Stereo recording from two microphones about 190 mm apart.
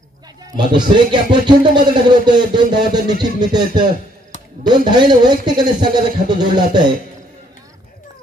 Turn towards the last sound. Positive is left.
turn(degrees=-20)  # may be behind; listen again after turning